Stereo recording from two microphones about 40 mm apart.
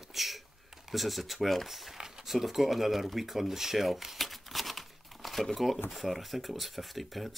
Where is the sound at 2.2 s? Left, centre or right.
Centre.